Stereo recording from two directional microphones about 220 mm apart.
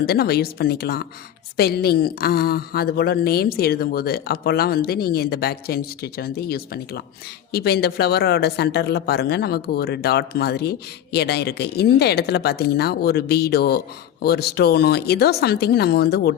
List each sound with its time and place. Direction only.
0.0 s speech: 45° left (ahead or behind)